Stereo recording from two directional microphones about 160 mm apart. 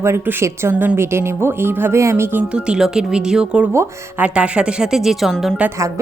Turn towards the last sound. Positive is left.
turn(degrees=-5)  # may be behind; listen again after turning